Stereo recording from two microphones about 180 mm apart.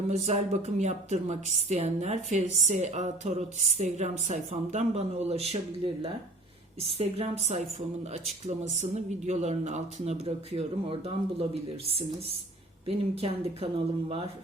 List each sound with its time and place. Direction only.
0.1 s a woman's voice: 35° right (ahead or behind)
8.8 s a woman's voice: 40° right (ahead or behind)